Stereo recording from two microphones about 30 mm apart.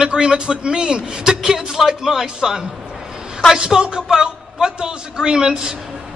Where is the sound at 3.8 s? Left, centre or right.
Right.